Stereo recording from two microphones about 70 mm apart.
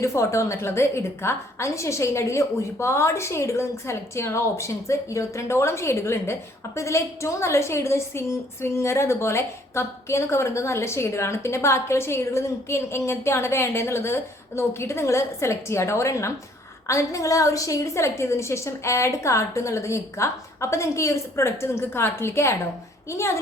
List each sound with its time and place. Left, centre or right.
0.0 s a woman's voice: left